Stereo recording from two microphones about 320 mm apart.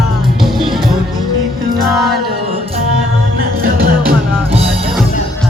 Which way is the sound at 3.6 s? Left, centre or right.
Right.